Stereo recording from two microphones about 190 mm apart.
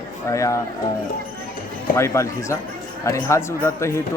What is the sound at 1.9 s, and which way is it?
A man's voice, 15° left (ahead or behind).